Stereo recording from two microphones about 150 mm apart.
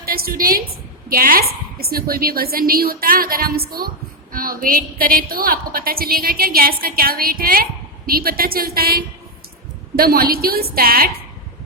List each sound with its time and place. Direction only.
0.0 s a woman's voice: 75° right (ahead or behind)
4.3 s a woman's voice: 70° right (ahead or behind)